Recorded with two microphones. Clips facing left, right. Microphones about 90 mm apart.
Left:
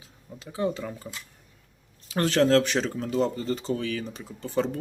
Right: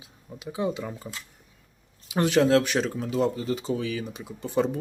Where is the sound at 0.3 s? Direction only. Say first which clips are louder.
Even; 15° right (ahead or behind).